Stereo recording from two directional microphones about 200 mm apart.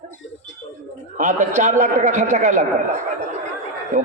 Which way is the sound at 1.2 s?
40° right (ahead or behind).